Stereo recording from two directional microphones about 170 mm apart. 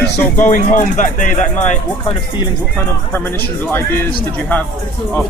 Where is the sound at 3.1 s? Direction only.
10° left (ahead or behind).